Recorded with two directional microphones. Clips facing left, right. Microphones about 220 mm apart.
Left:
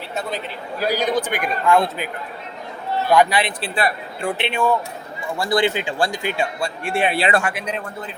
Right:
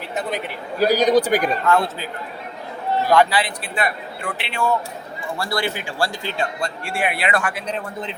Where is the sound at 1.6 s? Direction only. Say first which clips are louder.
Left 2 dB; 15° left (ahead or behind).